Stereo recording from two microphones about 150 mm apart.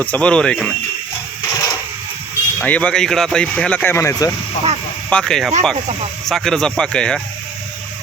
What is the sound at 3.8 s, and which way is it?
Speech, 15° left (ahead or behind).